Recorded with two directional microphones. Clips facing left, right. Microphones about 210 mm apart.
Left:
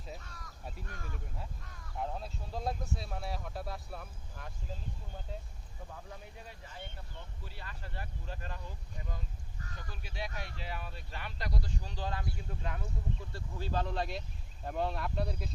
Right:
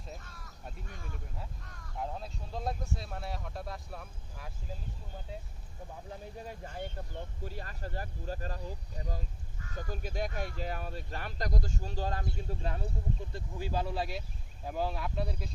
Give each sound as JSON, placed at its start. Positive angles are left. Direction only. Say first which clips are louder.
{"t": 0.1, "sound": "speech", "louder": "left 1 dB", "side_deg": 0}
{"t": 6.4, "sound": "speech", "louder": "right 8 dB", "side_deg": -45}
{"t": 13.3, "sound": "speech", "louder": "even", "side_deg": -10}